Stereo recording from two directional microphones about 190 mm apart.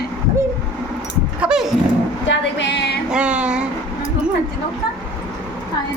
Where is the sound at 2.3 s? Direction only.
65° left (ahead or behind).